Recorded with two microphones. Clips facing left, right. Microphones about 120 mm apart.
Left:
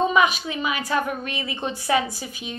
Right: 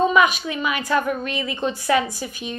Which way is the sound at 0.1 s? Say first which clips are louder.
Right 2 dB; 30° left (ahead or behind).